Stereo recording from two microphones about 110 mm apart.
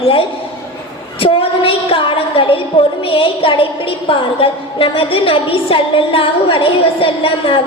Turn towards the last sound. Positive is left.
turn(degrees=55)  # may be behind; listen again after turning